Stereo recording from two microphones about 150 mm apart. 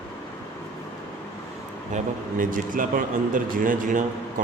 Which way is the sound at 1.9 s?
65° right (ahead or behind).